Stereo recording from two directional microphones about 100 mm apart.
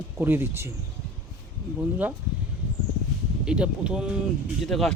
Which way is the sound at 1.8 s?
15° right (ahead or behind).